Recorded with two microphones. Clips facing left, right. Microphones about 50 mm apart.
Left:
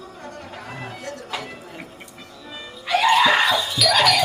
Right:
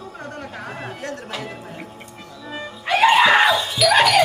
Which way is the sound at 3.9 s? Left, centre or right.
Right.